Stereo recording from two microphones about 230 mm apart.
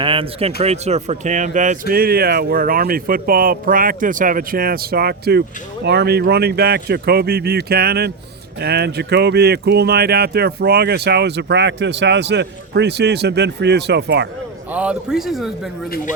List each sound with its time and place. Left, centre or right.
0.0 s speech: right
14.7 s a man's voice: centre